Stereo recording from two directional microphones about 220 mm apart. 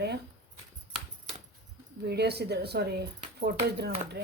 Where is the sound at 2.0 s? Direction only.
50° right (ahead or behind).